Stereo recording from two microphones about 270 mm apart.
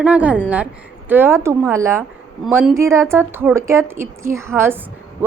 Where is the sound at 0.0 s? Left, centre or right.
Centre.